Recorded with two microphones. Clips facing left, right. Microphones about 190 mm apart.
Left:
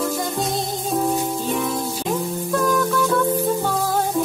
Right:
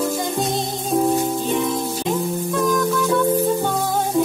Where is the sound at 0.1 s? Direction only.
Centre (ahead or behind).